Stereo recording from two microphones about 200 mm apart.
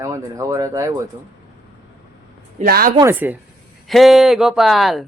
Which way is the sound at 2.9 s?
15° right (ahead or behind).